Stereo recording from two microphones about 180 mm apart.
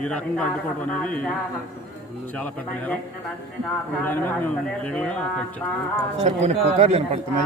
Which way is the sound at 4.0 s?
10° left (ahead or behind).